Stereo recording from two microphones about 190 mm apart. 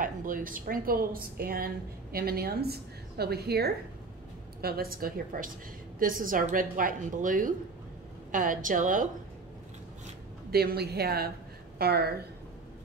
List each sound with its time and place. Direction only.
0.0 s a woman's voice: 45° right (ahead or behind)
10.5 s a woman's voice: 55° right (ahead or behind)